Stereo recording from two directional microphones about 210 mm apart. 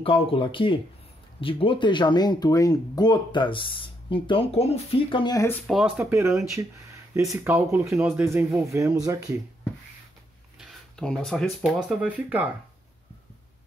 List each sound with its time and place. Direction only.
0.0 s speech: 25° left (ahead or behind)
5.7 s speech: centre (ahead or behind)
7.9 s speech: centre (ahead or behind)
8.2 s speech: 10° right (ahead or behind)
10.6 s speech: 5° left (ahead or behind)